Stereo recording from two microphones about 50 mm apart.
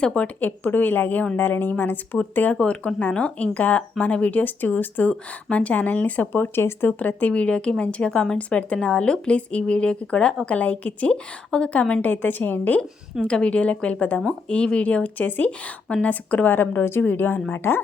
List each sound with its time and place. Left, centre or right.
0.0 s speech: left
0.3 s speech: left
2.6 s speech: left
7.0 s speech: left
11.1 s speech: centre
12.1 s speech: left
13.2 s speech: left
17.5 s speech: left